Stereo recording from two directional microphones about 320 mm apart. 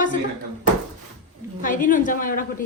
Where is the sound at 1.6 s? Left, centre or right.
Left.